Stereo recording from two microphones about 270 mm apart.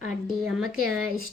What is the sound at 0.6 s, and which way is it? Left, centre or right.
Speech, right.